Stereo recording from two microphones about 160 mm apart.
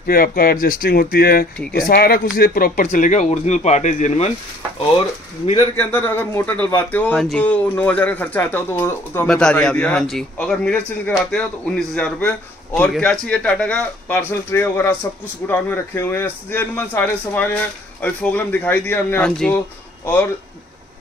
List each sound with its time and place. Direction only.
0.0 s speech: 70° left (ahead or behind); by 4.3 s 45° left (ahead or behind)
5.8 s speech: 10° left (ahead or behind)